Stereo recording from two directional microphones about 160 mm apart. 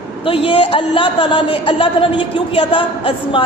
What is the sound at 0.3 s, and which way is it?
A woman's voice, 30° left (ahead or behind).